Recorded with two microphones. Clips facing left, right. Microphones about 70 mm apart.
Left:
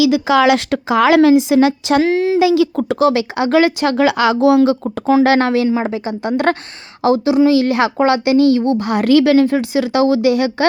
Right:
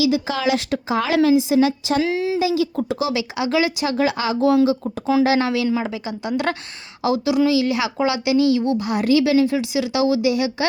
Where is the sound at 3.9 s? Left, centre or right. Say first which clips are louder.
Left 6 dB; left.